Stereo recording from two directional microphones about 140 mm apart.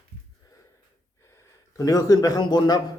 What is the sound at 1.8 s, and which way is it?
A man's voice, 25° left (ahead or behind).